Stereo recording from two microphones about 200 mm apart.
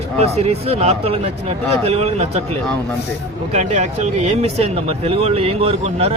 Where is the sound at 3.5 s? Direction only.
35° right (ahead or behind).